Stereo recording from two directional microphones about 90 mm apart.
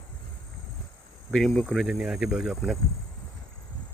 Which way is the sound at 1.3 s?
Centre (ahead or behind).